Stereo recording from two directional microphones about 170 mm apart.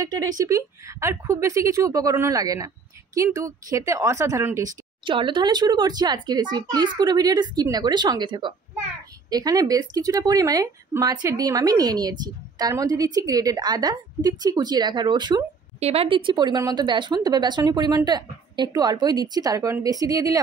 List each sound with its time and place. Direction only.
0.0 s a woman's voice: 20° right (ahead or behind)
5.0 s a woman's voice: 30° right (ahead or behind)
16.3 s a woman's voice: 25° right (ahead or behind)